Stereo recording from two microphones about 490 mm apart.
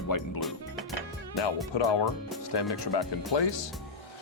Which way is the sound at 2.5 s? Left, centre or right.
Left.